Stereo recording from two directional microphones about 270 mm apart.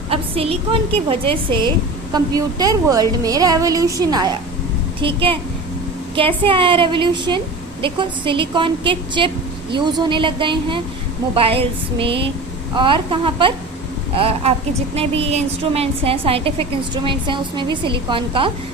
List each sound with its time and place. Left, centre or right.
0.1 s a woman's voice: right